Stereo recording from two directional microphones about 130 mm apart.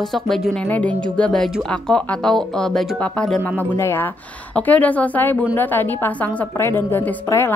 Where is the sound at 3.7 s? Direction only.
20° left (ahead or behind).